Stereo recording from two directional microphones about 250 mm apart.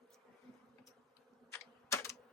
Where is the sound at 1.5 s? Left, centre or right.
Centre.